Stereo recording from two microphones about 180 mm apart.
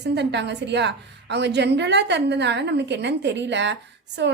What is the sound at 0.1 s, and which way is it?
A woman's voice, 70° right (ahead or behind).